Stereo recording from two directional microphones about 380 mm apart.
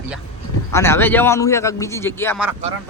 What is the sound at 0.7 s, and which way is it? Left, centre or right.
A man's voice, centre.